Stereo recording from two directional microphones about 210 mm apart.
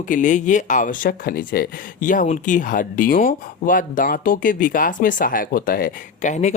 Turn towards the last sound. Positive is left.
turn(degrees=35)  # may be behind; listen again after turning